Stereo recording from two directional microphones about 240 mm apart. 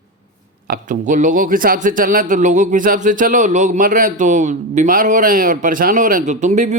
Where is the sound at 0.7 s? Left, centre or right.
Right.